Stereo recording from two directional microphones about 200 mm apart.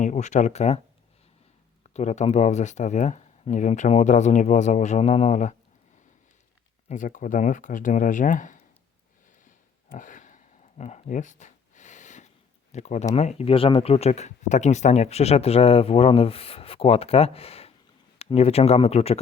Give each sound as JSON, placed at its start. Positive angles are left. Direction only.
{"t": 0.0, "sound": "speech", "side_deg": 35}
{"t": 1.9, "sound": "speech", "side_deg": 35}
{"t": 6.8, "sound": "speech", "side_deg": 40}
{"t": 9.9, "sound": "a sound", "side_deg": 40}
{"t": 12.7, "sound": "speech", "side_deg": 35}